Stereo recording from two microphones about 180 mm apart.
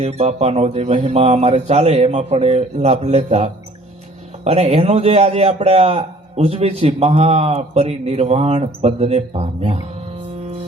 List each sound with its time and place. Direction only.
0.0 s a man's voice: 35° right (ahead or behind)